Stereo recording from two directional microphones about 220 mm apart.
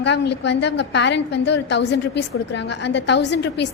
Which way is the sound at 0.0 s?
50° left (ahead or behind).